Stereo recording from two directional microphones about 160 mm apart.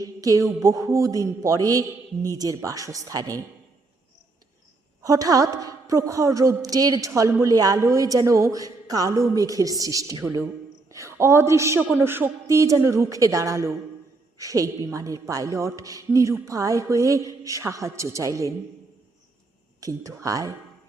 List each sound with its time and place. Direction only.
0.0 s a sound: 20° right (ahead or behind)
0.6 s a woman's voice: 20° right (ahead or behind)
5.0 s a woman's voice: 20° right (ahead or behind)
19.8 s a woman's voice: 20° right (ahead or behind)